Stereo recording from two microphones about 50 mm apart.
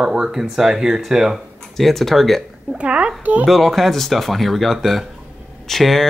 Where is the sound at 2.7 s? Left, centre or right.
Right.